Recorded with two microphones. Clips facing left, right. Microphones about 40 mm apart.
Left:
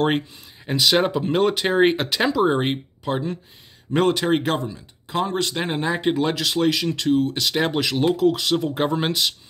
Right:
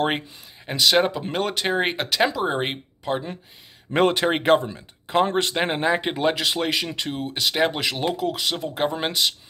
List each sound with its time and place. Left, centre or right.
0.7 s speech: centre
4.0 s speech: right
4.6 s speech: right; by 9.3 s centre